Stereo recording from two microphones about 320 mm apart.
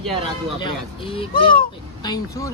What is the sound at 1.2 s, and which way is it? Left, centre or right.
Speech, centre.